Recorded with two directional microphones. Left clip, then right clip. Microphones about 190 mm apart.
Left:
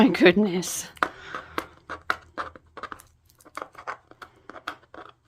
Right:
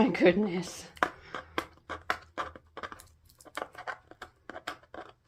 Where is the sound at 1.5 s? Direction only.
10° left (ahead or behind).